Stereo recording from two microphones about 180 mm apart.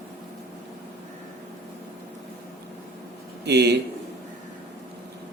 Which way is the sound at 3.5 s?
65° right (ahead or behind).